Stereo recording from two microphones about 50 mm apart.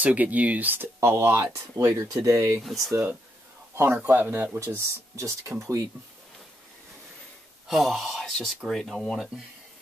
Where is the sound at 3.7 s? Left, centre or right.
Right.